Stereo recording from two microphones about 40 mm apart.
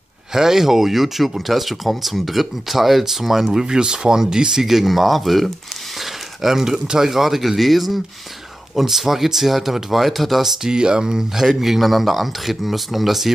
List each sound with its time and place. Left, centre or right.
0.3 s speech: centre
3.6 s speech: centre
6.4 s speech: centre
10.6 s speech: centre
11.4 s speech: centre